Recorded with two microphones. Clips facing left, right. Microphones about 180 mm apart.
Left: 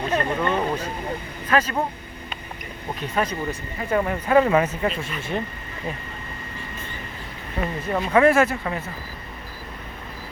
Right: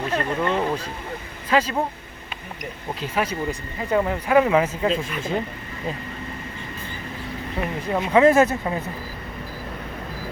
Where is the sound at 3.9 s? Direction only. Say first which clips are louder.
Even; 10° right (ahead or behind).